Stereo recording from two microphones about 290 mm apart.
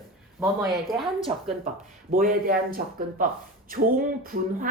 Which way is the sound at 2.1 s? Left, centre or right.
Right.